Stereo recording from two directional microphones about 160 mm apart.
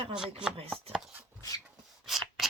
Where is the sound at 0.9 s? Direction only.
5° right (ahead or behind).